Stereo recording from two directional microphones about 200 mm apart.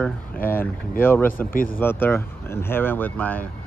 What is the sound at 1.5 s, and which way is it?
Speech, 45° left (ahead or behind).